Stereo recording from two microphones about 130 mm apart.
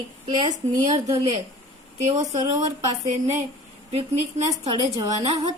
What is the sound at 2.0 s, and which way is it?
Speech, 65° right (ahead or behind).